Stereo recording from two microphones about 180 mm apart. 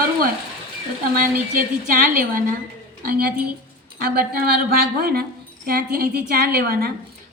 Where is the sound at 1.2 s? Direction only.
50° right (ahead or behind).